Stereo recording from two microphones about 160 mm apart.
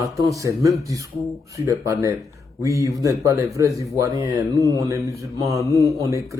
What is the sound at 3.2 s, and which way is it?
Speech, 20° right (ahead or behind).